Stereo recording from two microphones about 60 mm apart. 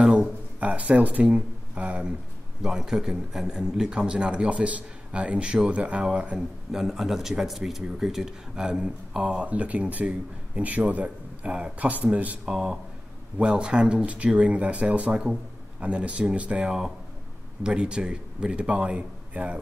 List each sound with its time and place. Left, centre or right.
0.0 s speech: centre
6.7 s speech: centre; by 12.4 s right
12.4 s speech: centre